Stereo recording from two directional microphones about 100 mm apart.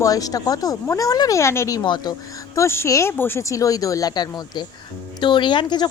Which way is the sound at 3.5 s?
35° left (ahead or behind).